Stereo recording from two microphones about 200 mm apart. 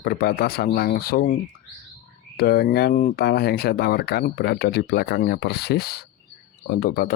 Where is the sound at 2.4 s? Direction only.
50° left (ahead or behind).